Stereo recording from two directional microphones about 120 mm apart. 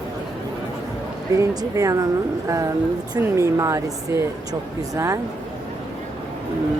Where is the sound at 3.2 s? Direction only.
25° right (ahead or behind).